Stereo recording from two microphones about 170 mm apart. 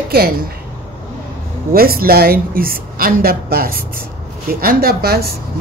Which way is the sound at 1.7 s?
60° right (ahead or behind).